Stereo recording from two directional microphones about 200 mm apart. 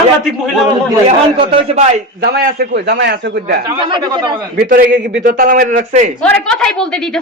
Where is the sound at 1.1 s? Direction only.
30° right (ahead or behind).